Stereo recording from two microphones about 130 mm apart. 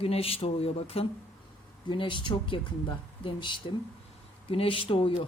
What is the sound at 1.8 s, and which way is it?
Speech, 40° left (ahead or behind).